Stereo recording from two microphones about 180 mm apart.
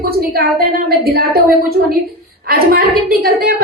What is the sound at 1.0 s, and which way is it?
A woman's voice, 60° right (ahead or behind).